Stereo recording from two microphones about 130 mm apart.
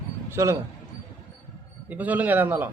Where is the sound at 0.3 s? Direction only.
20° right (ahead or behind).